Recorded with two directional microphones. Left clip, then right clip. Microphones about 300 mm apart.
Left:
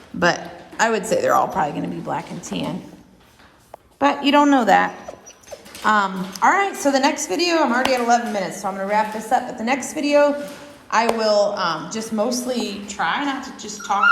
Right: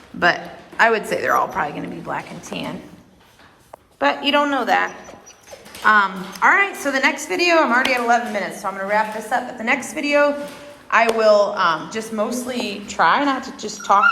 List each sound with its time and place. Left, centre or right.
0.2 s a woman's voice: centre
4.0 s speech: left
5.8 s a woman's voice: centre
7.6 s speech: centre
7.9 s a woman's voice: centre